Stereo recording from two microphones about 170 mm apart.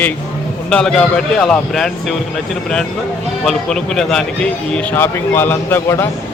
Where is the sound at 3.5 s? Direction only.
5° left (ahead or behind).